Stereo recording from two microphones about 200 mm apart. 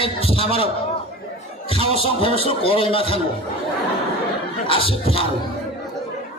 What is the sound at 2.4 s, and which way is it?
Music, 25° left (ahead or behind).